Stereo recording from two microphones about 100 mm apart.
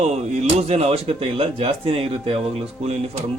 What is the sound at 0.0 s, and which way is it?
Speech, 90° right.